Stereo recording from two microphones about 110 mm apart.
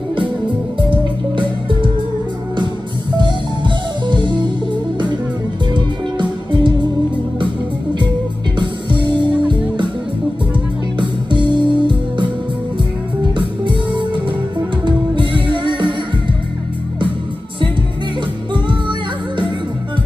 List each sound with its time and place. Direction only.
0.7 s music: 50° right (ahead or behind)
3.2 s music: 45° right (ahead or behind)
5.8 s music: 45° right (ahead or behind)
11.0 s music: 45° right (ahead or behind)
13.3 s music: 45° right (ahead or behind)
18.5 s music: 45° right (ahead or behind)